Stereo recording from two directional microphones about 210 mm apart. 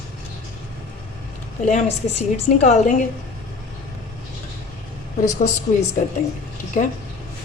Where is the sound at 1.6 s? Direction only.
35° left (ahead or behind).